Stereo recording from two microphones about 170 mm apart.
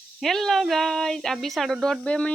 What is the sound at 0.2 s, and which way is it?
Speech, centre (ahead or behind).